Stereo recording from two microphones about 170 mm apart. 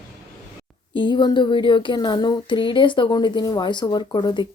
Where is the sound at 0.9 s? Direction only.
25° left (ahead or behind).